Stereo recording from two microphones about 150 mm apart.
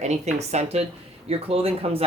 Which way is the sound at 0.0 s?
50° right (ahead or behind).